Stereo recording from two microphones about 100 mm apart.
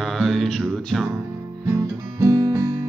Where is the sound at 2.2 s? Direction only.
35° right (ahead or behind).